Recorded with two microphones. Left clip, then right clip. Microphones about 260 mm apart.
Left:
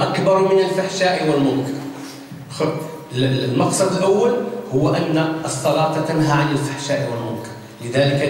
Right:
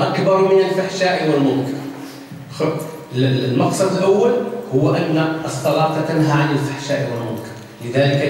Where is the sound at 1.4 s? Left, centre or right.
Right.